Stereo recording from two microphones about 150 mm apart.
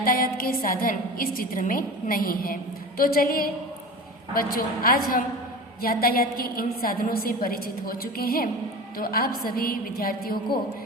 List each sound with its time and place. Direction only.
0.0 s a woman's voice: 70° left (ahead or behind)
4.5 s a woman's voice: 75° left (ahead or behind); by 8.4 s 90° left
9.0 s a woman's voice: 80° left